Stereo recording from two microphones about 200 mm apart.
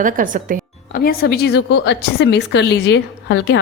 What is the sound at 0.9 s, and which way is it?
A woman's voice, 50° left (ahead or behind).